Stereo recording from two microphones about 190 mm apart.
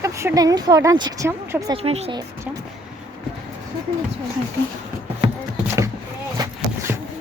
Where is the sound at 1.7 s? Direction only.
35° right (ahead or behind).